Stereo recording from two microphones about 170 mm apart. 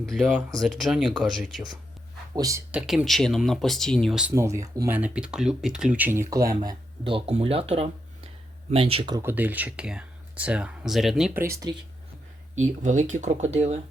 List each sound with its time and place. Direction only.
0.0 s speech: centre (ahead or behind)
2.3 s speech: 20° right (ahead or behind)
2.7 s speech: centre (ahead or behind)
4.4 s speech: 15° right (ahead or behind); by 9.1 s 35° right (ahead or behind)
9.1 s speech: 10° right (ahead or behind)
11.3 s speech: 15° right (ahead or behind)
12.5 s speech: 45° right (ahead or behind)